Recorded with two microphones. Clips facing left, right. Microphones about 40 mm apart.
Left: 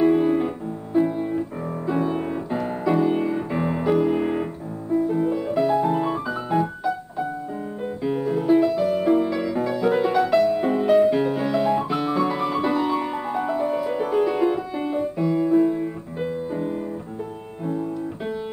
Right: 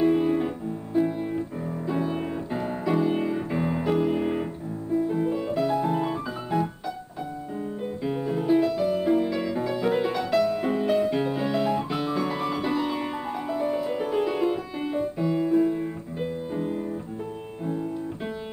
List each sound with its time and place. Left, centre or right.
0.0 s music: centre
8.0 s piano: centre
8.8 s music: centre
9.1 s music: centre
10.2 s music: centre
10.7 s music: centre